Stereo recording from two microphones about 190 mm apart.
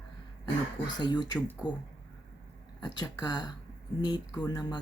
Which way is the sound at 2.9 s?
20° left (ahead or behind).